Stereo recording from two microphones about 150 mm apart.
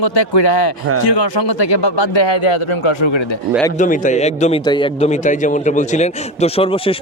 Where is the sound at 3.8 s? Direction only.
55° left (ahead or behind); by 4.9 s 30° left (ahead or behind).